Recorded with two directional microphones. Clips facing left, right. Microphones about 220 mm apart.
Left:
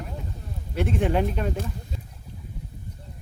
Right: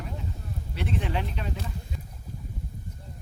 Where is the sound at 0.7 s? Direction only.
50° left (ahead or behind).